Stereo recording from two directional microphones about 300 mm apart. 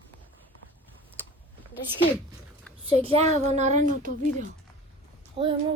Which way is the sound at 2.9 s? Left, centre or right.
Centre.